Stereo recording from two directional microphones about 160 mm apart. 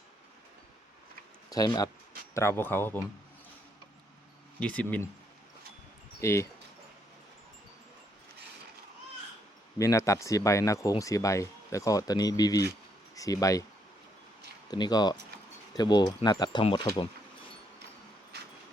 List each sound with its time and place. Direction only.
1.5 s speech: 25° left (ahead or behind)
4.6 s speech: 10° left (ahead or behind)
6.1 s speech: 15° left (ahead or behind)
9.7 s speech: 20° left (ahead or behind)
14.7 s speech: 25° left (ahead or behind)